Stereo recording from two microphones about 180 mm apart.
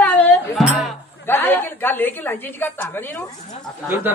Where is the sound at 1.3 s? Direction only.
10° left (ahead or behind).